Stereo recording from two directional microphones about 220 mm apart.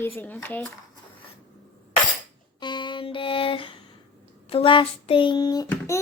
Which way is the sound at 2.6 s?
20° left (ahead or behind).